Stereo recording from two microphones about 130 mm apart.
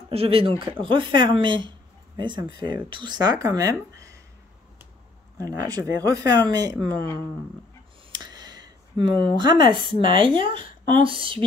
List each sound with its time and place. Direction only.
0.1 s speech: 45° right (ahead or behind); by 4.2 s 25° right (ahead or behind)
5.4 s speech: 30° right (ahead or behind)
8.1 s a sound: 30° right (ahead or behind)
10.0 s speech: 40° right (ahead or behind)